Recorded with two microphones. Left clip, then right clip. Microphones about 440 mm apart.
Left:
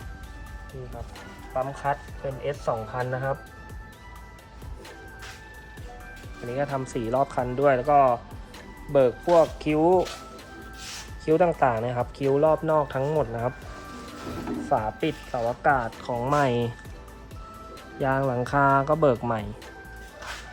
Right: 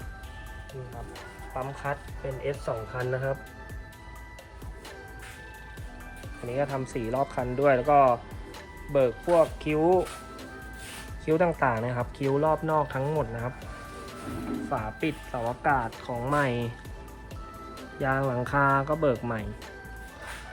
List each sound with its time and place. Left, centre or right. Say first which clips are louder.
1.5 s speech: left 6 dB; centre
6.5 s speech: left 1 dB; centre
11.3 s speech: left 3 dB; centre
14.7 s speech: left 7 dB; centre
18.0 s speech: left 3 dB; centre